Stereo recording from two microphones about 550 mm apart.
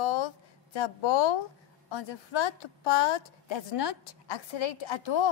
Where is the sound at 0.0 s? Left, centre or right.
Left.